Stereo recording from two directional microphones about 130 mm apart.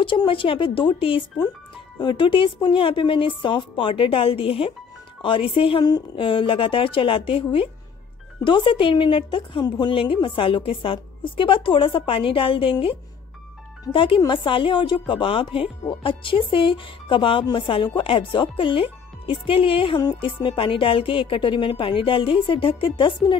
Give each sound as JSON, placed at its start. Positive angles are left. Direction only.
{"t": 0.0, "sound": "a woman's voice", "side_deg": 40}
{"t": 13.9, "sound": "speech", "side_deg": 40}